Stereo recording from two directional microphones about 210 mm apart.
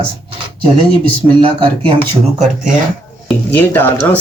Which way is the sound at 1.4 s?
25° right (ahead or behind).